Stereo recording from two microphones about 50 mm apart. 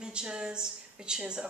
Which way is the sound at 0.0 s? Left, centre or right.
Centre.